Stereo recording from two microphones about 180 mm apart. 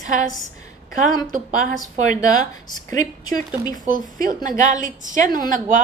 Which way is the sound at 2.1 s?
20° left (ahead or behind).